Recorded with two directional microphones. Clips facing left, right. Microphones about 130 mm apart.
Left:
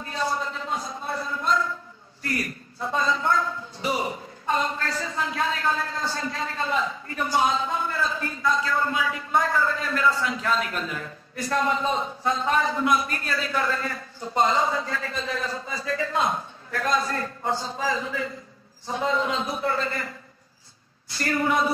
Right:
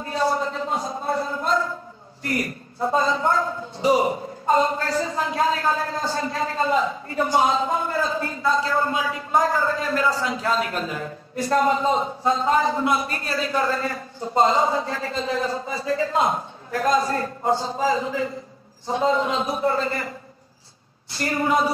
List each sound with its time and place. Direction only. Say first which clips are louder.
0.6 s a sound: right 5 dB; 30° right (ahead or behind)
2.2 s speech: right 4 dB; 20° right (ahead or behind)
21.1 s speech: right 2 dB; 25° right (ahead or behind)